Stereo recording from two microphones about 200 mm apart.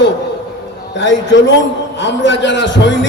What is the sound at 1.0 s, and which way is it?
A man's voice, 65° left (ahead or behind).